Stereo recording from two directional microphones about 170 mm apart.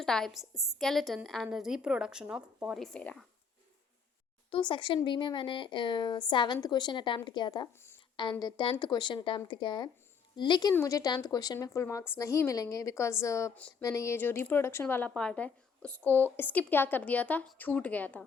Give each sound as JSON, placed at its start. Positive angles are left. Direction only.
{"t": 0.0, "sound": "a woman's voice", "side_deg": 5}
{"t": 4.5, "sound": "speech", "side_deg": 30}
{"t": 13.6, "sound": "a woman's voice", "side_deg": 5}